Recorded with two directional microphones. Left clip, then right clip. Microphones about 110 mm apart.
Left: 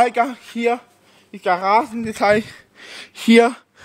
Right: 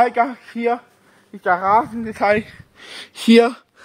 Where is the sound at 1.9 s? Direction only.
15° left (ahead or behind).